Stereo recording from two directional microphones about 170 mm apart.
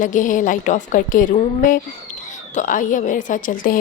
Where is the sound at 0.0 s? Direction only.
50° left (ahead or behind).